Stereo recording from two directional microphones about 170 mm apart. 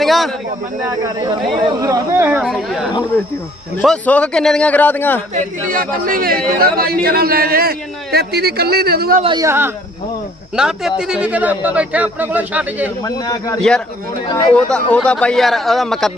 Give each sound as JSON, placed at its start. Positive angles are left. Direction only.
{"t": 0.0, "sound": "a sound", "side_deg": 0}
{"t": 0.9, "sound": "a man's voice", "side_deg": -20}
{"t": 5.3, "sound": "a man's voice", "side_deg": -50}
{"t": 9.2, "sound": "speech", "side_deg": -25}
{"t": 9.5, "sound": "a man's voice", "side_deg": -15}
{"t": 10.6, "sound": "a man's voice", "side_deg": -5}
{"t": 13.1, "sound": "a man's voice", "side_deg": 20}
{"t": 13.6, "sound": "a man's voice", "side_deg": 5}